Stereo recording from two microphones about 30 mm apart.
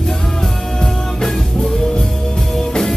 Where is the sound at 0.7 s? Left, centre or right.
Centre.